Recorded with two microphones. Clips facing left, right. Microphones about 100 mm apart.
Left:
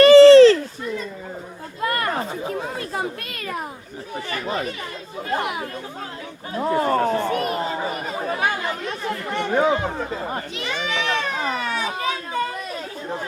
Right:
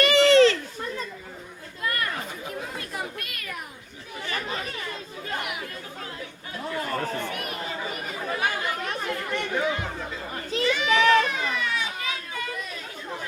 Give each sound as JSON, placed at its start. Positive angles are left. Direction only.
{"t": 0.0, "sound": "children playing", "side_deg": 35}
{"t": 1.8, "sound": "a sound", "side_deg": 30}
{"t": 4.1, "sound": "chatter", "side_deg": 40}
{"t": 5.3, "sound": "speech", "side_deg": 30}
{"t": 6.5, "sound": "chatter", "side_deg": 35}
{"t": 10.6, "sound": "children playing", "side_deg": 35}